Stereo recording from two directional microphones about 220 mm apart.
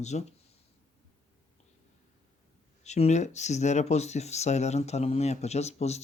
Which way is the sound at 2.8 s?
30° left (ahead or behind).